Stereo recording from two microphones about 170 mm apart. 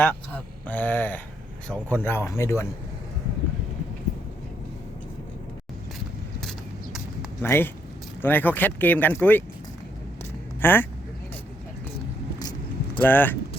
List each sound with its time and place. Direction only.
0.0 s speech: 10° left (ahead or behind)
7.4 s speech: 15° left (ahead or behind)
10.6 s speech: 10° left (ahead or behind)
12.4 s keys jangling: 25° left (ahead or behind)
13.0 s speech: 10° left (ahead or behind)